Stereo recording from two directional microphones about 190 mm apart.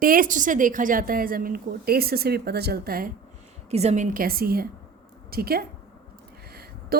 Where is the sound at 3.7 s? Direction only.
35° right (ahead or behind); by 5.6 s 55° right (ahead or behind).